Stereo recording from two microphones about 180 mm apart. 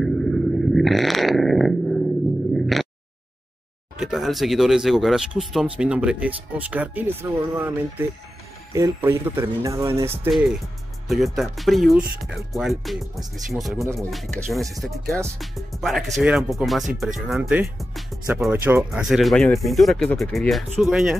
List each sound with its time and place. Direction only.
0.0 s a sound: centre (ahead or behind)
4.0 s a man's voice: centre (ahead or behind)
11.1 s speech: centre (ahead or behind)